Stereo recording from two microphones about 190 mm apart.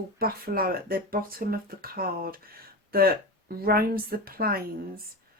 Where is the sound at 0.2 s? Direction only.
50° right (ahead or behind).